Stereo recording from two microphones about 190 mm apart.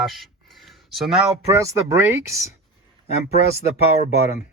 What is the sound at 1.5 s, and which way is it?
Speech, 15° right (ahead or behind).